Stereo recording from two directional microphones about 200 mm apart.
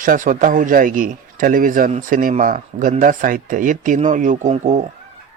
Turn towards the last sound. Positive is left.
turn(degrees=-35)  # may be behind; listen again after turning